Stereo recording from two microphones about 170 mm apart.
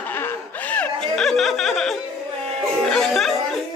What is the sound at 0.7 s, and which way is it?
Music, 5° left (ahead or behind).